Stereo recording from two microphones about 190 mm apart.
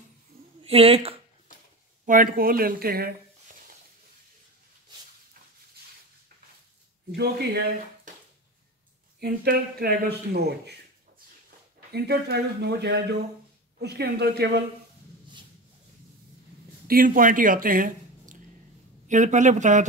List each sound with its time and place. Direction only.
0.7 s speech: 30° right (ahead or behind)
2.0 s speech: 45° right (ahead or behind)
7.2 s speech: 55° right (ahead or behind)
9.2 s speech: 55° right (ahead or behind)
11.9 s speech: 60° right (ahead or behind)
16.8 s speech: 50° right (ahead or behind)
19.0 s speech: 40° right (ahead or behind)